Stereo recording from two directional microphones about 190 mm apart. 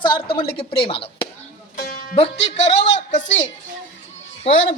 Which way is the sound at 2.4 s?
35° left (ahead or behind).